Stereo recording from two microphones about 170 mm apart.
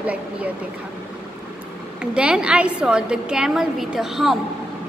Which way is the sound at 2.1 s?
5° right (ahead or behind).